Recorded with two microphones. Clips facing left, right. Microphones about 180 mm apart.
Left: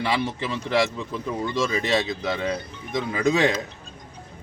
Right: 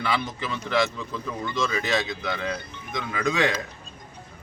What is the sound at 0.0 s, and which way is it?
A man's voice, 30° left (ahead or behind).